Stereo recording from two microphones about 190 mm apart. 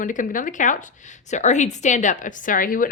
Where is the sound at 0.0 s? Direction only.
45° left (ahead or behind).